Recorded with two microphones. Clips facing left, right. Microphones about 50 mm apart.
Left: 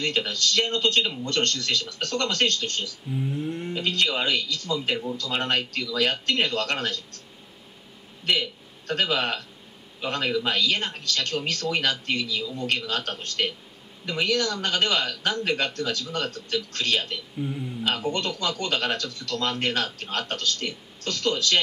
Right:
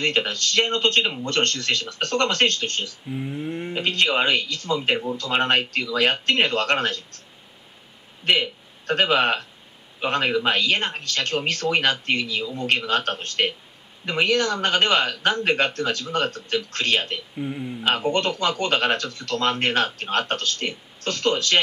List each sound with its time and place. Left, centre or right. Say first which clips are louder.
0.0 s speech: right 3 dB; right
3.1 s speech: left 2 dB; right
3.7 s speech: right 4 dB; right
8.3 s a man's voice: right 4 dB; right
17.4 s speech: right 1 dB; right
17.8 s speech: right 5 dB; right